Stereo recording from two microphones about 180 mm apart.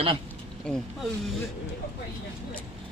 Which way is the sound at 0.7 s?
5° left (ahead or behind).